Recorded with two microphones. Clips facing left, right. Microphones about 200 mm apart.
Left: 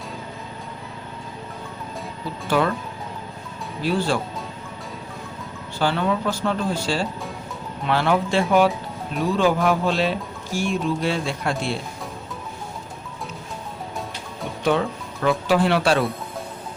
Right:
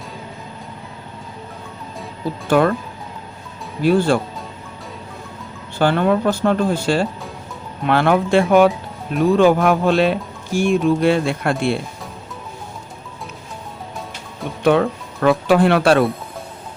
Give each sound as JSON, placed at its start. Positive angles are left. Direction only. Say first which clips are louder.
{"t": 2.5, "sound": "speech", "louder": "right 6 dB", "side_deg": -50}
{"t": 3.8, "sound": "speech", "louder": "right 7 dB", "side_deg": -50}
{"t": 5.8, "sound": "speech", "louder": "right 6 dB", "side_deg": -55}
{"t": 14.6, "sound": "speech", "louder": "right 6 dB", "side_deg": -60}